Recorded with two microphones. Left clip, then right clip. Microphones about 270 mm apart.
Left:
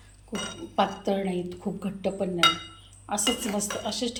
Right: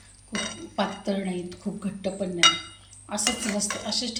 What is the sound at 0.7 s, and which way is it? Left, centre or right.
Speech, centre.